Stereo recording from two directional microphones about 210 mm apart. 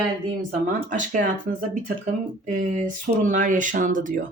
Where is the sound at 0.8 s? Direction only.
40° right (ahead or behind).